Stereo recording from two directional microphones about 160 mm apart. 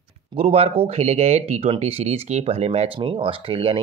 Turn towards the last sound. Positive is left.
turn(degrees=-35)  # may be behind; listen again after turning